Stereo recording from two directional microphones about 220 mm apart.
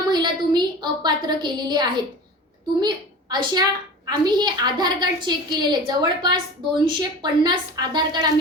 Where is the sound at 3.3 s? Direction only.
20° right (ahead or behind).